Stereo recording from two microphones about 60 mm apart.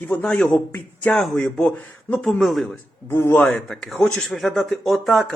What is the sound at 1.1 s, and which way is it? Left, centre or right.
Speech, centre.